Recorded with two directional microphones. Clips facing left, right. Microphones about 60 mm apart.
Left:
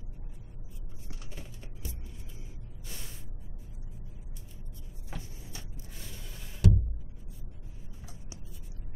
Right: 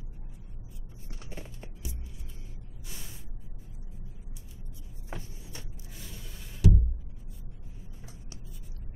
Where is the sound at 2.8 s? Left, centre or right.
Centre.